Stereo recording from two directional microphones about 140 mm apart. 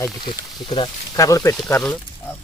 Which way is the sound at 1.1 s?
25° left (ahead or behind).